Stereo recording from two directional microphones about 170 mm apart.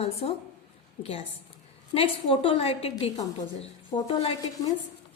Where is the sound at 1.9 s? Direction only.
35° left (ahead or behind).